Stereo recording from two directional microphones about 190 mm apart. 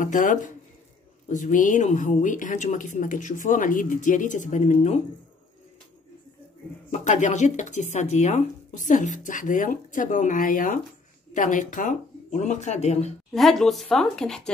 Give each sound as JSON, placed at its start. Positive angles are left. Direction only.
{"t": 0.0, "sound": "speech", "side_deg": 45}
{"t": 6.9, "sound": "speech", "side_deg": 40}
{"t": 13.3, "sound": "speech", "side_deg": 0}